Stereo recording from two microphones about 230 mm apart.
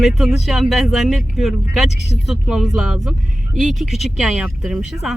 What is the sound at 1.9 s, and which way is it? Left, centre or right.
Speech, left.